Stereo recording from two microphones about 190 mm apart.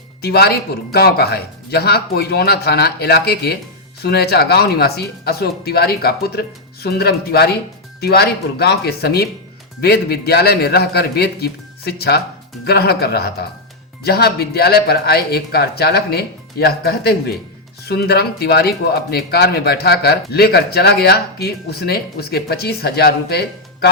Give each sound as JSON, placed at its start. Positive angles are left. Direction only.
{"t": 0.2, "sound": "speech", "side_deg": 55}